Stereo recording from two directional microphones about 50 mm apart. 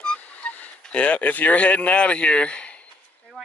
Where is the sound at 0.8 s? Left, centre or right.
Left.